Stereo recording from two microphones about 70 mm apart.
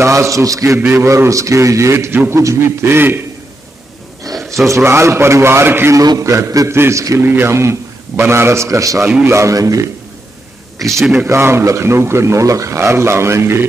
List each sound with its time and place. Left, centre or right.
0.0 s a man's voice: right
0.7 s a man's voice: right
4.2 s a sound: right
4.6 s speech: right
6.1 s a man's voice: right
6.7 s a man's voice: right
7.2 s a man's voice: right
10.8 s a man's voice: centre
11.2 s speech: right